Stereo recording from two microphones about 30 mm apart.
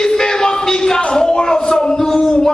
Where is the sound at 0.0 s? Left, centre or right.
Left.